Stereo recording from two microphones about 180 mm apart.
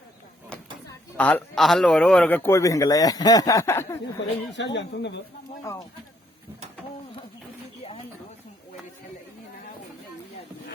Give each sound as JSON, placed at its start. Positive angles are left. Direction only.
{"t": 1.1, "sound": "a man's voice", "side_deg": 5}
{"t": 4.5, "sound": "speech", "side_deg": 80}